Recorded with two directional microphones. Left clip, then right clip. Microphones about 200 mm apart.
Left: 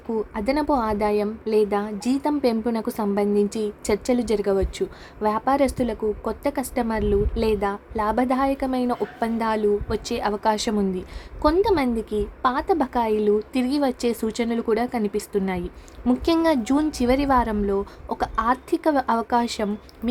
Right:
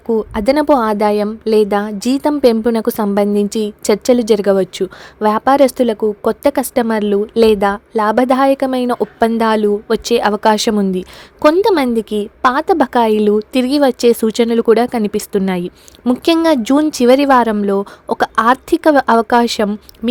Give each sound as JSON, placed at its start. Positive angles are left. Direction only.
{"t": 0.1, "sound": "a woman's voice", "side_deg": -35}